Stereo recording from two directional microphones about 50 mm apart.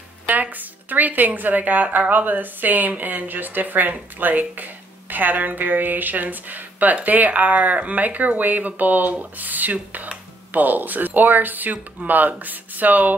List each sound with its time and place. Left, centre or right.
0.3 s speech: right